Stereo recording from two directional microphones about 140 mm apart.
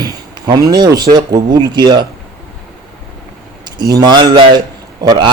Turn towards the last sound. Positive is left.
turn(degrees=-30)  # may be behind; listen again after turning